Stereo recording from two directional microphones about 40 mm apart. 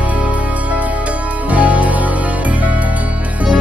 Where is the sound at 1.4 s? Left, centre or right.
Right.